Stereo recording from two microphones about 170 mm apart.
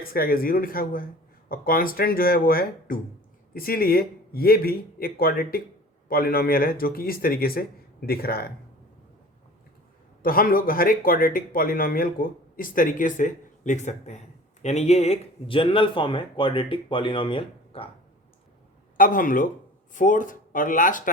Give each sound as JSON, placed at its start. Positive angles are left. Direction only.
{"t": 0.0, "sound": "speech", "side_deg": 60}
{"t": 10.2, "sound": "speech", "side_deg": 55}
{"t": 18.9, "sound": "speech", "side_deg": 55}